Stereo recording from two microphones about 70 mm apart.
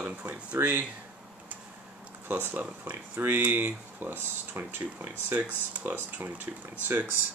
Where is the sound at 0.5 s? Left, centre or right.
Right.